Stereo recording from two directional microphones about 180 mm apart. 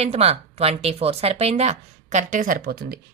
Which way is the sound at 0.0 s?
35° right (ahead or behind).